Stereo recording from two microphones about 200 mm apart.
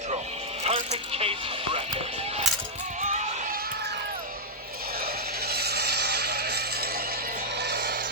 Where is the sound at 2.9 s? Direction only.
35° right (ahead or behind).